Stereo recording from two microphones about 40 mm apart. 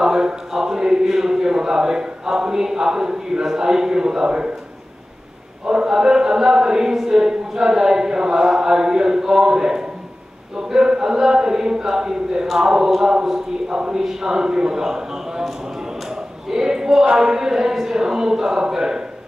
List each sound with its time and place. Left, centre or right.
0.0 s speech: centre
5.7 s speech: centre
16.1 s a sound: centre
17.1 s speech: centre